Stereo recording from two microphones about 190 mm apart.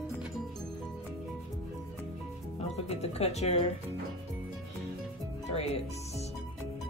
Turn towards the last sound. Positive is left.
turn(degrees=35)  # may be behind; listen again after turning